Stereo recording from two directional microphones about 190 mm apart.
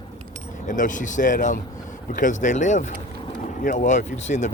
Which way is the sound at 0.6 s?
40° left (ahead or behind).